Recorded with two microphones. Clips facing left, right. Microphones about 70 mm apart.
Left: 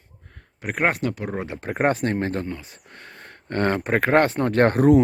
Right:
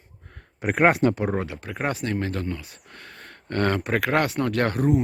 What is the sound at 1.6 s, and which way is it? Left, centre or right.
Speech, left.